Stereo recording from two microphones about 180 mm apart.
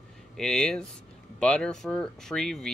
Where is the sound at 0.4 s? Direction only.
5° left (ahead or behind).